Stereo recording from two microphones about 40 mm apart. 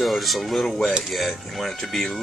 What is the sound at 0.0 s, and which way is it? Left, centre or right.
Speech, centre.